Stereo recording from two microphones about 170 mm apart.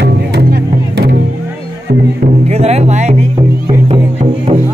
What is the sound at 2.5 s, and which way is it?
Music, 40° right (ahead or behind).